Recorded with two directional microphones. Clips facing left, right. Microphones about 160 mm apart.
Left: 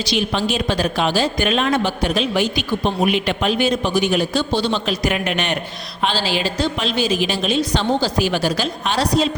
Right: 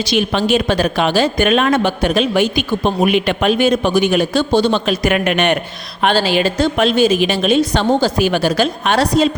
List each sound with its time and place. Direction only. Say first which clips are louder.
0.1 s speech: right 6 dB; 60° right (ahead or behind)